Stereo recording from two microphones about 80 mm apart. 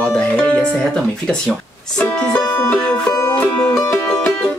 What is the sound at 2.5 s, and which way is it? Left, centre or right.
Music, centre.